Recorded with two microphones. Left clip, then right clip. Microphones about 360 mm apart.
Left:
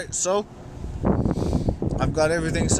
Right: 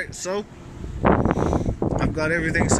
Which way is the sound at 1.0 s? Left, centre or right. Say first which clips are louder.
Right 6 dB; right.